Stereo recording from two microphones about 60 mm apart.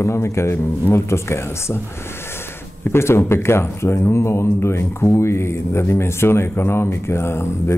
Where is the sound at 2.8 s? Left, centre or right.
Left.